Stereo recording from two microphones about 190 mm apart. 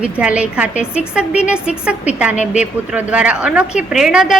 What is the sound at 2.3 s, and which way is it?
Speech, 40° left (ahead or behind).